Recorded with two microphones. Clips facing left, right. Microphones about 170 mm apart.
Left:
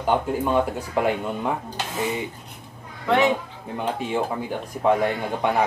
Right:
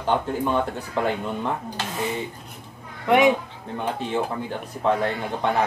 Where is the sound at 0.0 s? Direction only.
10° left (ahead or behind).